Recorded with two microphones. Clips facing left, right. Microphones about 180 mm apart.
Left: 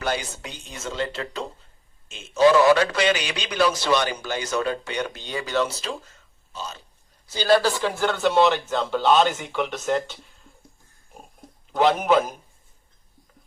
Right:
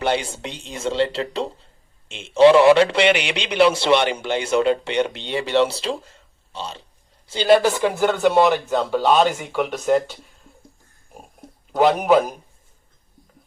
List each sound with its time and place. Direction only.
0.0 s a man's voice: 30° right (ahead or behind)
8.3 s speech: centre (ahead or behind)
11.1 s a sound: 5° right (ahead or behind)